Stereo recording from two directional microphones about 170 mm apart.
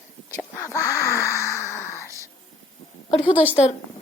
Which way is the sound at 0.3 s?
20° left (ahead or behind).